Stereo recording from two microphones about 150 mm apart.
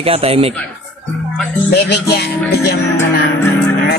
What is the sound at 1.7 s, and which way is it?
Speech, 90° left.